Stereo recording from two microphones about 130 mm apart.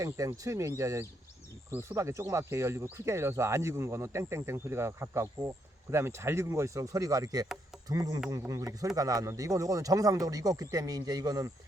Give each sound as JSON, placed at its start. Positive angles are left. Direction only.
{"t": 0.0, "sound": "speech", "side_deg": -25}